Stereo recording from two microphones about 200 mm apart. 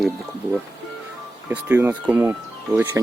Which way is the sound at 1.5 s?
10° right (ahead or behind).